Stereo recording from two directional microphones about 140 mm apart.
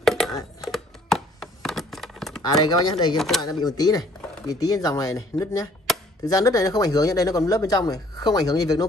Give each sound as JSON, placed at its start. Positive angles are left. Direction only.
{"t": 0.0, "sound": "a sound", "side_deg": 0}
{"t": 0.7, "sound": "computer keyboard", "side_deg": 0}
{"t": 2.5, "sound": "speech", "side_deg": 30}
{"t": 3.2, "sound": "speech", "side_deg": 0}
{"t": 3.4, "sound": "speech", "side_deg": 25}
{"t": 5.9, "sound": "a sound", "side_deg": 0}
{"t": 6.2, "sound": "speech", "side_deg": 25}